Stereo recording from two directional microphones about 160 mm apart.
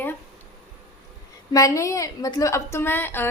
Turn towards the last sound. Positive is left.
turn(degrees=15)  # may be behind; listen again after turning